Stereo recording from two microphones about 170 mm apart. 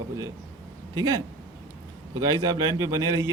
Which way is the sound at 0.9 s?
25° right (ahead or behind).